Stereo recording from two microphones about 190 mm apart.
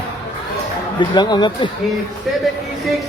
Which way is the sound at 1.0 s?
20° left (ahead or behind).